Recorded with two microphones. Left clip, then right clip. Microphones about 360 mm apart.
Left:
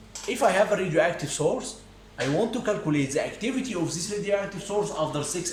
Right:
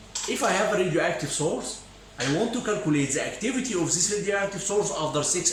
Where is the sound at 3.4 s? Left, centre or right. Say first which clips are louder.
Right 2 dB; centre.